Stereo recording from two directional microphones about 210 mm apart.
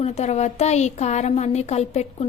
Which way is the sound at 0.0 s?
30° left (ahead or behind).